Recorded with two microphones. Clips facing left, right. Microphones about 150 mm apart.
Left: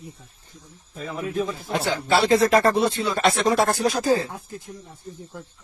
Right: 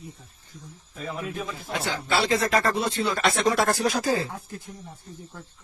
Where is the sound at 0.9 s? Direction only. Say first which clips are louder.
Left 5 dB; 35° left (ahead or behind).